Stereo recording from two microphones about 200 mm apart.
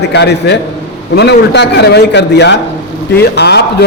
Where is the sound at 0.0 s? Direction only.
55° left (ahead or behind).